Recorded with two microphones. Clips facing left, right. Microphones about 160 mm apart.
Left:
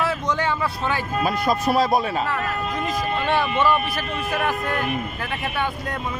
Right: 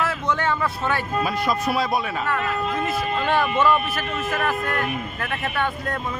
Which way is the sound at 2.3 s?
15° left (ahead or behind).